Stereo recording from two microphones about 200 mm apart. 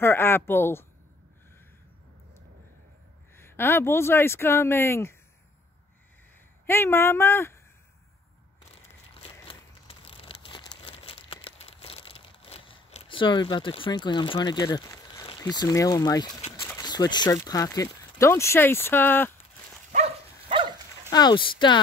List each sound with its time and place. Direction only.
0.0 s speech: 10° left (ahead or behind)
3.3 s speech: 10° left (ahead or behind)
6.6 s speech: 10° left (ahead or behind)
9.1 s crumpling: 30° left (ahead or behind)
16.6 s speech: 15° left (ahead or behind)
19.9 s dog: 35° right (ahead or behind)
21.1 s speech: 20° left (ahead or behind)